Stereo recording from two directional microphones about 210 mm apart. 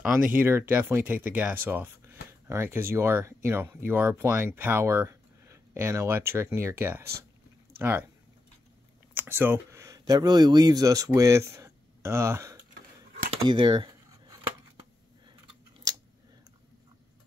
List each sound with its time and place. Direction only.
0.0 s speech: 10° right (ahead or behind)
9.1 s speech: 10° right (ahead or behind)
13.4 s dishes: 20° right (ahead or behind)
15.9 s a sound: 20° right (ahead or behind)